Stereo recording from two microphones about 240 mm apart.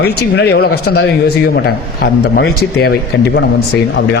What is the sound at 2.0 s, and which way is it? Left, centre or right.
A man's voice, left.